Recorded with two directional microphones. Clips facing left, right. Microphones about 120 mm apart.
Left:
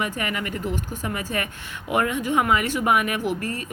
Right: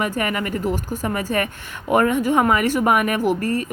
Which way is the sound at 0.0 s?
45° right (ahead or behind).